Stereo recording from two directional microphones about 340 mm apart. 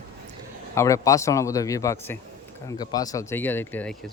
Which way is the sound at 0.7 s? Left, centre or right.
Centre.